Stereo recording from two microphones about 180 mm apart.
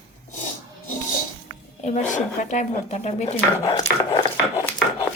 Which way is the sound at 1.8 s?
40° left (ahead or behind).